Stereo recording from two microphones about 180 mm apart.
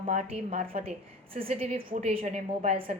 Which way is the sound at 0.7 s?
50° right (ahead or behind).